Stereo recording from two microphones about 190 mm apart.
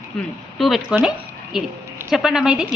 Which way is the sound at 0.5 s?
Centre (ahead or behind).